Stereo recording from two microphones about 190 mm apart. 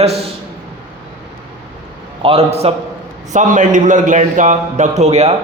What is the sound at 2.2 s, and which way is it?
A man's voice, 30° right (ahead or behind).